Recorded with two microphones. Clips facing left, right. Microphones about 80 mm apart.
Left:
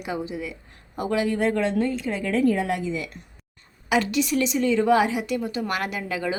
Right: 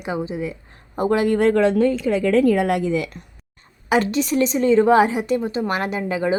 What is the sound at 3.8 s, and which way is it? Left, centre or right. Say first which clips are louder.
A woman's voice: right 3 dB; right.